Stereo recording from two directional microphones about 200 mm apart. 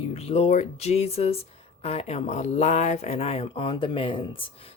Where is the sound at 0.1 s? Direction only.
30° left (ahead or behind).